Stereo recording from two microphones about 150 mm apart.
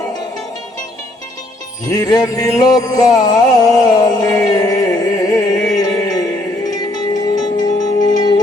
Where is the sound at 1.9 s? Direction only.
25° left (ahead or behind).